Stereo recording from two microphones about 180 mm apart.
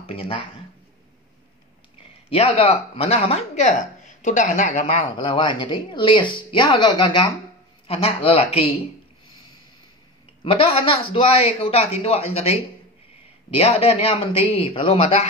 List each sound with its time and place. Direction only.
0.0 s speech: 30° left (ahead or behind)
2.2 s speech: 35° left (ahead or behind)
10.4 s speech: 30° left (ahead or behind)
13.6 s speech: 35° left (ahead or behind)